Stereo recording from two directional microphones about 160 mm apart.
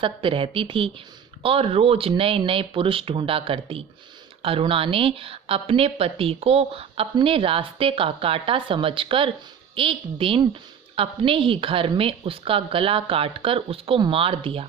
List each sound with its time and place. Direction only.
0.0 s a woman's voice: 30° right (ahead or behind)